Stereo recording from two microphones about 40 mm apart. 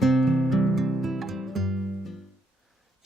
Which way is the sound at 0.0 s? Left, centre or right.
Centre.